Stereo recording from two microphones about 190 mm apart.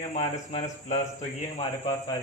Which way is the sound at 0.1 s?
35° left (ahead or behind).